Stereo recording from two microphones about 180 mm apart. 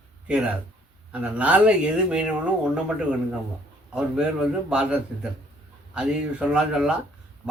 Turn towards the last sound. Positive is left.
turn(degrees=-5)  # may be behind; listen again after turning